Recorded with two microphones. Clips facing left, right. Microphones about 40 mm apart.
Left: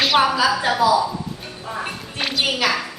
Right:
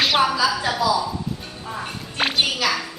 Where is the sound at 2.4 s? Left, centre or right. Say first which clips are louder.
Left 2 dB; left.